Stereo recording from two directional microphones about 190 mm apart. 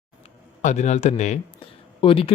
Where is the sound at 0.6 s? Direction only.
40° left (ahead or behind).